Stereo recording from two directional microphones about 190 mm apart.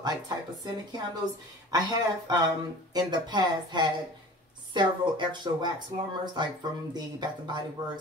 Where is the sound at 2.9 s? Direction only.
20° right (ahead or behind).